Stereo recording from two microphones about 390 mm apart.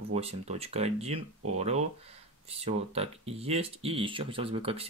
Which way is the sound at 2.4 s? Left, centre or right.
Centre.